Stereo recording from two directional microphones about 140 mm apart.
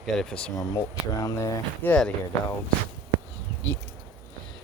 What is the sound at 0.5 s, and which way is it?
Speech, 25° left (ahead or behind).